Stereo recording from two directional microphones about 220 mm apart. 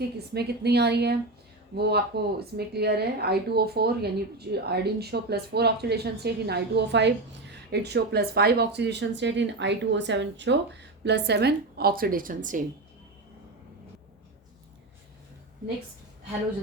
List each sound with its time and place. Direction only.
0.3 s speech: 50° right (ahead or behind)